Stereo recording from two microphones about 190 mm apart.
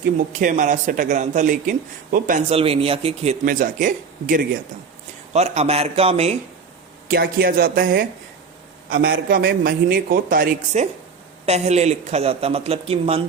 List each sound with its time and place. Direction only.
0.3 s a man's voice: 40° right (ahead or behind)
2.5 s a man's voice: 30° right (ahead or behind)
3.4 s a woman's voice: 45° right (ahead or behind)
7.1 s a woman's voice: 50° right (ahead or behind); by 13.2 s 30° right (ahead or behind)